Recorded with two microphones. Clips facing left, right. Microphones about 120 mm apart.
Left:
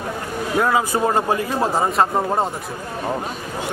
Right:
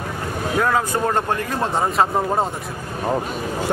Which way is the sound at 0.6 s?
5° left (ahead or behind).